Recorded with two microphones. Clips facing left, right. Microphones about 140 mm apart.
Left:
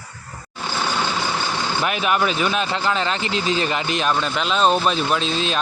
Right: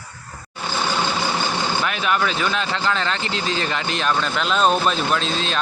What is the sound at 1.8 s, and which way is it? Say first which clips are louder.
Speech: left 4 dB; 15° left (ahead or behind).